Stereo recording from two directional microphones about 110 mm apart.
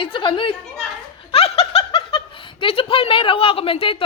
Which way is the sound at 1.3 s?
60° left (ahead or behind).